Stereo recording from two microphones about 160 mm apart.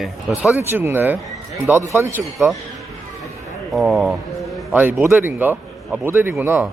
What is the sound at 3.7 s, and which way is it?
Speech, centre (ahead or behind).